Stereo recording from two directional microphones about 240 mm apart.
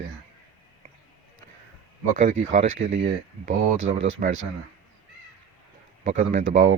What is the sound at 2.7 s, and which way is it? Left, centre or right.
Speech, right.